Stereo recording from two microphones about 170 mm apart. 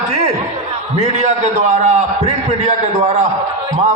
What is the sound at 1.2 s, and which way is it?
A man's voice, 40° right (ahead or behind).